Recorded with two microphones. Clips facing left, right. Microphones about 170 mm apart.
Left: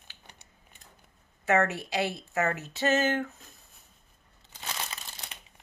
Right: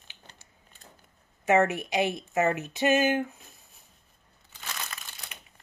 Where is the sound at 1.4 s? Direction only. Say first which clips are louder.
Right 3 dB; 15° right (ahead or behind).